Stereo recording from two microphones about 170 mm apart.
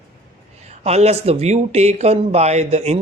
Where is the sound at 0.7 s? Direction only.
40° right (ahead or behind).